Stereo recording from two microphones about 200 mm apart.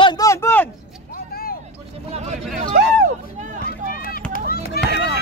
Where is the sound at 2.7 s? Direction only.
55° right (ahead or behind).